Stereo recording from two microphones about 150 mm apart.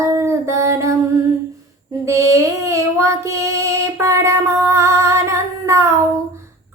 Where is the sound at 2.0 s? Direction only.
20° right (ahead or behind).